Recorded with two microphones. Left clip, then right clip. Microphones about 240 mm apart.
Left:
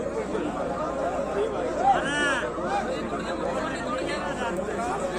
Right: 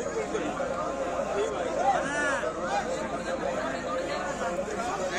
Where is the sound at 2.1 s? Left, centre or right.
Left.